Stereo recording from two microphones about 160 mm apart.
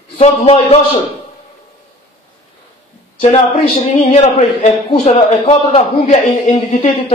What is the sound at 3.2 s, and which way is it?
A man's voice, 45° left (ahead or behind).